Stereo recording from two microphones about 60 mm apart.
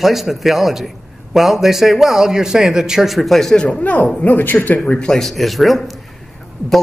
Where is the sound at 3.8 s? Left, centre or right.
Left.